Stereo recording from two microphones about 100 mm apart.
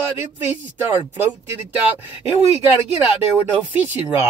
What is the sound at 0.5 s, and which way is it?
Speech, 15° right (ahead or behind).